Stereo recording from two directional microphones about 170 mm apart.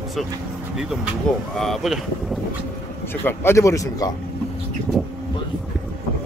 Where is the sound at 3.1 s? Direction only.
15° left (ahead or behind).